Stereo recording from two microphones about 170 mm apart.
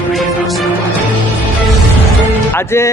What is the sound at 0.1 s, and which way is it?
Music, centre (ahead or behind).